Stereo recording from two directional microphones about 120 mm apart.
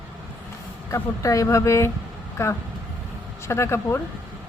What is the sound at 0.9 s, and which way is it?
Speech, 25° left (ahead or behind).